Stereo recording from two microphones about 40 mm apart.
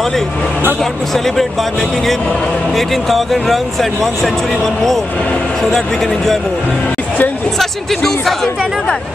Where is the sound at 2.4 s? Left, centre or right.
Left.